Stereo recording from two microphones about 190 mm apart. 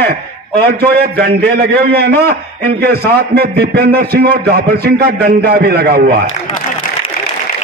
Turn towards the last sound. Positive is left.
turn(degrees=-55)  # may be behind; listen again after turning